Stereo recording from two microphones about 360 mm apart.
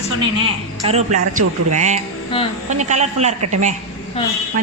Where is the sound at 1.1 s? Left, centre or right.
Right.